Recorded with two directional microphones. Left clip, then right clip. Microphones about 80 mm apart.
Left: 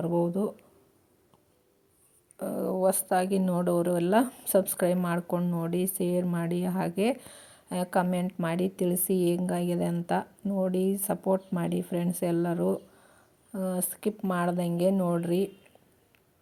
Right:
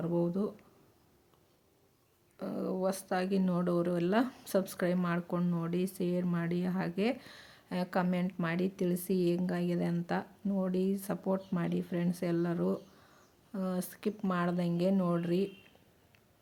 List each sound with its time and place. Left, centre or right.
0.0 s a woman's voice: left
2.4 s a woman's voice: left
5.4 s speech: left
5.6 s a woman's voice: left